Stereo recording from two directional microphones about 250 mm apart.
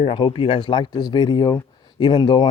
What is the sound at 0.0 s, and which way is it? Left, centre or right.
Speech, left.